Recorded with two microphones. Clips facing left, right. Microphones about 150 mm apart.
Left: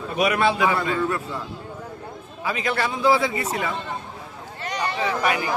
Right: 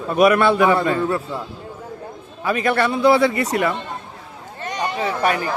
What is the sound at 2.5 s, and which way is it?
A man's voice, 55° right (ahead or behind).